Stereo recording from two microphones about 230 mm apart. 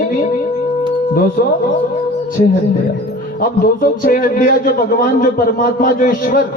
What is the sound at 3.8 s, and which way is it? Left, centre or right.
A man's voice, left.